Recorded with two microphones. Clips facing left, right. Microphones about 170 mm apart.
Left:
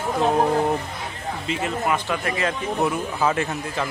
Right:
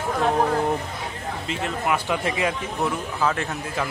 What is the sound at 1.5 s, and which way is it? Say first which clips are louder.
Speech: left 2 dB; centre (ahead or behind).